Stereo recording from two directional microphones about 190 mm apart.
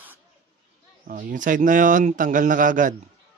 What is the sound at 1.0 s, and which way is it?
Speech, 45° right (ahead or behind).